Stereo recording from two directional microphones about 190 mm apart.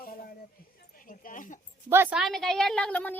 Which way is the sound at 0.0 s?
45° left (ahead or behind).